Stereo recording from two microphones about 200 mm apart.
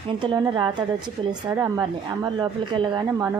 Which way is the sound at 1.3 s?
15° right (ahead or behind).